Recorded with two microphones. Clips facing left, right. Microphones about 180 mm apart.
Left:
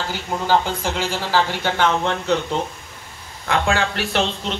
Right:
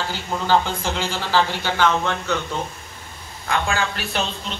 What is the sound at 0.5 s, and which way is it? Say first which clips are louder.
Speech: even; 10° left (ahead or behind).